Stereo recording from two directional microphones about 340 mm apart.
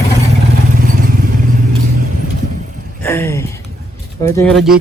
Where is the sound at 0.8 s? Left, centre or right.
Right.